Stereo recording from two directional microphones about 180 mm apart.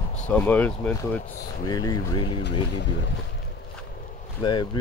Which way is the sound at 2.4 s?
75° left (ahead or behind).